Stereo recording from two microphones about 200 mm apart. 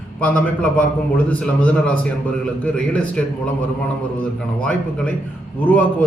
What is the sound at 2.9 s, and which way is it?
Speech, 5° left (ahead or behind).